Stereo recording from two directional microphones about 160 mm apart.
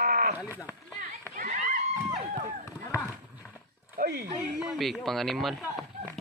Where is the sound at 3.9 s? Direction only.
70° right (ahead or behind).